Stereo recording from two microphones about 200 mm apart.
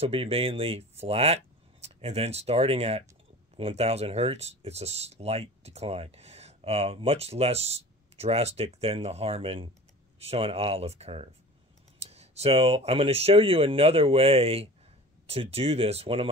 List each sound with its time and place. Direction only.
0.0 s speech: 30° right (ahead or behind)